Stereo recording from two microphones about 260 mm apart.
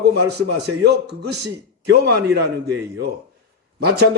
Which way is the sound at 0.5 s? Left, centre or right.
Right.